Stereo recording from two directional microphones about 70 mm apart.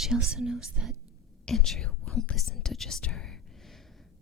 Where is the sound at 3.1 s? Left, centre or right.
Centre.